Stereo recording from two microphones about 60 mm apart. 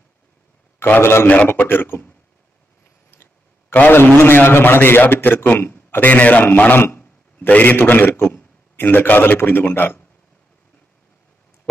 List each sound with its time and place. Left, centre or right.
0.8 s a man's voice: left
1.2 s a man's voice: left
3.7 s a man's voice: left